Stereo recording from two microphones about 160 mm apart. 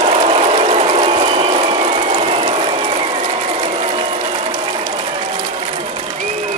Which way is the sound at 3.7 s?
40° right (ahead or behind).